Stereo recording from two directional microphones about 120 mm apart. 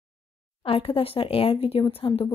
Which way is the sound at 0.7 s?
50° left (ahead or behind).